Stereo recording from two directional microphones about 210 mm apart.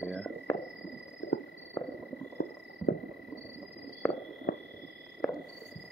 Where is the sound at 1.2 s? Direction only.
60° left (ahead or behind).